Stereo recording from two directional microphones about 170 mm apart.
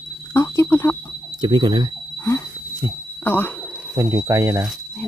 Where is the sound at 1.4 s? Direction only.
25° right (ahead or behind).